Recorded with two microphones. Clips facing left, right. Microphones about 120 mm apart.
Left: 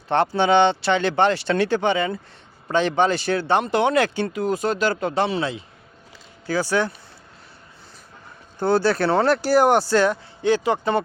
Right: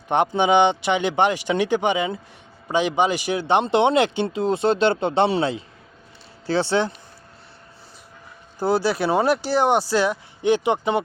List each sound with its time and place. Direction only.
0.1 s speech: 15° right (ahead or behind)
8.5 s speech: 5° right (ahead or behind)
10.4 s speech: 20° right (ahead or behind)